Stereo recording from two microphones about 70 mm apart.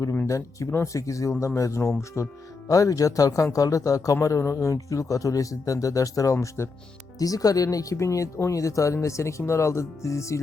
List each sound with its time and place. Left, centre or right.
0.3 s speech: left
2.6 s speech: left
7.2 s speech: left